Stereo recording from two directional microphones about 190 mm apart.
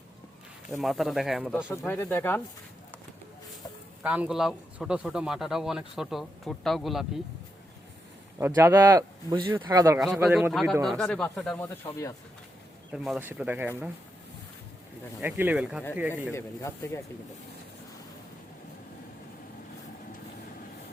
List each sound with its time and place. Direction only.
0.8 s a man's voice: centre (ahead or behind)
1.8 s speech: 10° left (ahead or behind)
4.0 s a man's voice: 5° right (ahead or behind)
8.4 s speech: 10° right (ahead or behind)
10.5 s a man's voice: centre (ahead or behind)
12.9 s speech: 5° right (ahead or behind)
15.2 s speech: 10° right (ahead or behind)
16.3 s speech: 15° left (ahead or behind)